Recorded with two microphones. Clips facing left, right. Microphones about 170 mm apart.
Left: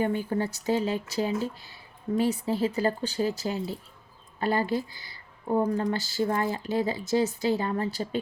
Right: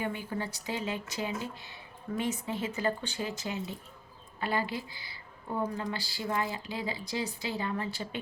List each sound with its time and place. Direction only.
0.0 s speech: 40° left (ahead or behind)